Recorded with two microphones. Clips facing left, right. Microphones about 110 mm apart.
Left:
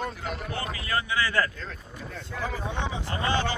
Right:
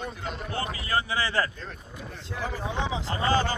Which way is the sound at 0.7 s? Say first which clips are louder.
Even; 30° right (ahead or behind).